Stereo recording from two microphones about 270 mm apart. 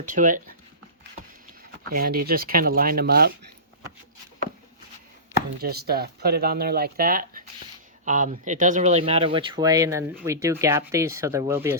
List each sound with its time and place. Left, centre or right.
0.0 s speech: right
1.9 s speech: right
5.5 s speech: right; by 11.8 s centre